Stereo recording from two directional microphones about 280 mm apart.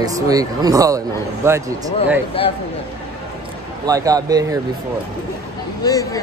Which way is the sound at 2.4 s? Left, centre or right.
Centre.